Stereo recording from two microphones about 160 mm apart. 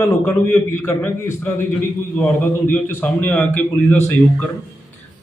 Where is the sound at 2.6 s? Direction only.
10° left (ahead or behind).